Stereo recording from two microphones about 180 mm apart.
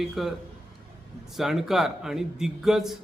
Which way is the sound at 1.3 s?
Centre (ahead or behind).